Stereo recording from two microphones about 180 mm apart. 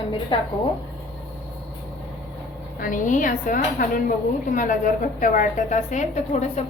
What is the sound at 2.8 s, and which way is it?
A woman's voice, 45° left (ahead or behind).